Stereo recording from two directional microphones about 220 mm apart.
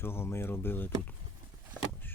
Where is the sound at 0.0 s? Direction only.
10° left (ahead or behind).